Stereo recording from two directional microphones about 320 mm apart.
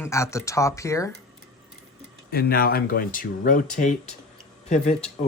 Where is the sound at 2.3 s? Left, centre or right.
Left.